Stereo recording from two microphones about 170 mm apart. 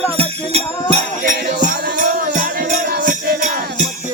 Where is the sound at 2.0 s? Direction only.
50° right (ahead or behind).